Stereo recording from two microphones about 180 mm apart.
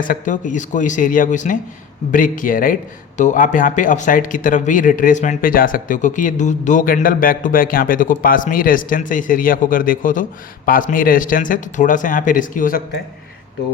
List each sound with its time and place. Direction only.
0.0 s speech: 45° left (ahead or behind)